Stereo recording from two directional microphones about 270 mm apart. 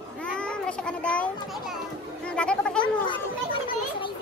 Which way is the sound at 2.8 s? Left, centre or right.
Centre.